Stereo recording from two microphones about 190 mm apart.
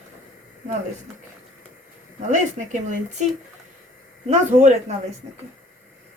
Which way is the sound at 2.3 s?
40° right (ahead or behind).